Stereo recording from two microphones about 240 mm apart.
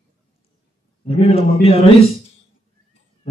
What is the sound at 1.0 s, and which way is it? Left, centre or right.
Speech, left.